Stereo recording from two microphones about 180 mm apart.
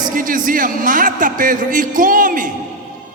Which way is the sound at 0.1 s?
50° right (ahead or behind).